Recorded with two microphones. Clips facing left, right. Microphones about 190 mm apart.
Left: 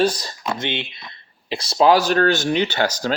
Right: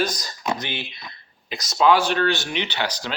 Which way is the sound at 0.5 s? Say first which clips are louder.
Left 5 dB; 25° left (ahead or behind).